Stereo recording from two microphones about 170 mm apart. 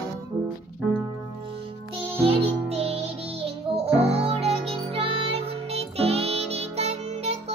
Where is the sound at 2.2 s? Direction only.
35° right (ahead or behind).